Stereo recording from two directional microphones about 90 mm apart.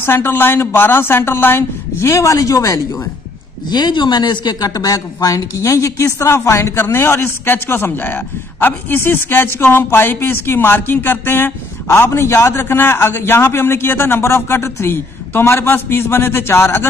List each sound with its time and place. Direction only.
0.0 s speech: 25° left (ahead or behind)
3.7 s speech: 55° left (ahead or behind); by 16.8 s 30° left (ahead or behind)